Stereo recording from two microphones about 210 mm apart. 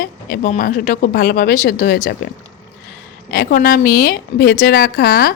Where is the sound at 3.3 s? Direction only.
45° left (ahead or behind).